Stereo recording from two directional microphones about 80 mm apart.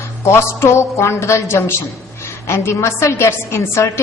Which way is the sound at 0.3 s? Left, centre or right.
Left.